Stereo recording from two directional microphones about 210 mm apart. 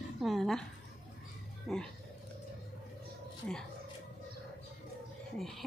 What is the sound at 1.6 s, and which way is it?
Speech, 5° left (ahead or behind).